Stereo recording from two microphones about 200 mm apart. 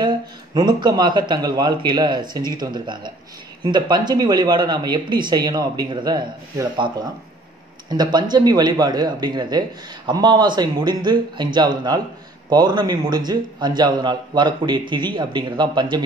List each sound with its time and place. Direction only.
0.6 s speech: 20° right (ahead or behind)